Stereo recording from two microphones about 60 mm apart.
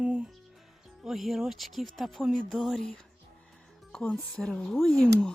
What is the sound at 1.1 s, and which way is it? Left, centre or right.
Speech, centre.